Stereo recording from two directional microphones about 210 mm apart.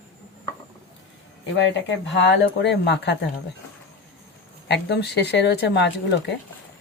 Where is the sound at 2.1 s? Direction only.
55° left (ahead or behind).